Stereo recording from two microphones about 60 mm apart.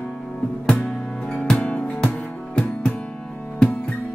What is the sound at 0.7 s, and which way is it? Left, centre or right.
Music, centre.